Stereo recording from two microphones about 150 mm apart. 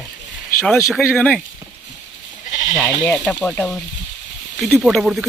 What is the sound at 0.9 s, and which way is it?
Speech, 10° left (ahead or behind).